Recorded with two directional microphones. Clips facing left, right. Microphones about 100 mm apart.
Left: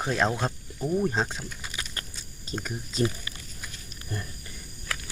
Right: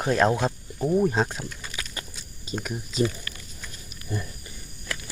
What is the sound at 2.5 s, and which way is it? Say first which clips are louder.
Speech: right 3 dB; 5° right (ahead or behind).